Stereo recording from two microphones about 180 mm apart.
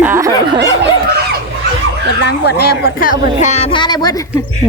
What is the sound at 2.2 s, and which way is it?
A woman's voice, 65° left (ahead or behind).